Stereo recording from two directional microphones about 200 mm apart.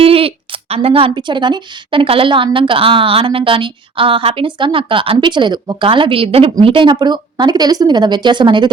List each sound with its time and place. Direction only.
0.0 s speech: 30° right (ahead or behind)